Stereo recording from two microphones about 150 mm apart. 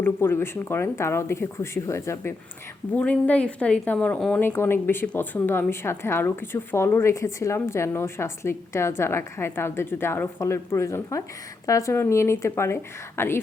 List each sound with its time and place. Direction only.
0.0 s a woman's voice: 15° left (ahead or behind)